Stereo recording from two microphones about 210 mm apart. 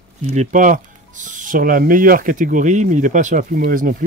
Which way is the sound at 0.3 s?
35° right (ahead or behind).